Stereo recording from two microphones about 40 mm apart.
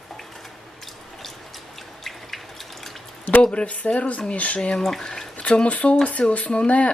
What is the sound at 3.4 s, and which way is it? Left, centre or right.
Speech, left.